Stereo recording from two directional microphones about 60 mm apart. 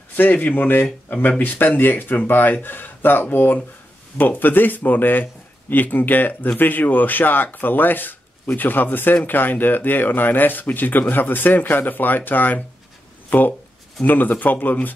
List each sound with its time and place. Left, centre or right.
0.1 s speech: left